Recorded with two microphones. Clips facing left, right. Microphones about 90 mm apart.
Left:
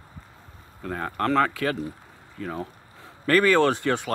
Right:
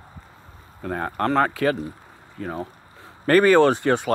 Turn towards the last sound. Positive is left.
turn(degrees=-30)  # may be behind; listen again after turning